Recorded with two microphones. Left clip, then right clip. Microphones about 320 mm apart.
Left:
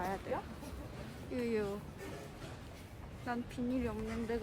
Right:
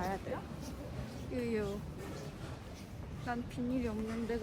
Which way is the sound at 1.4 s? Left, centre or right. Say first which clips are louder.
Left 1 dB; centre.